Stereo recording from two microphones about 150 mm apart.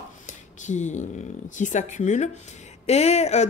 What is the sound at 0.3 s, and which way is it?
A woman's voice, 55° left (ahead or behind).